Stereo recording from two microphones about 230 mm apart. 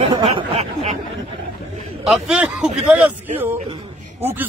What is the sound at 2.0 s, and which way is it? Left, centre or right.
Speech, centre.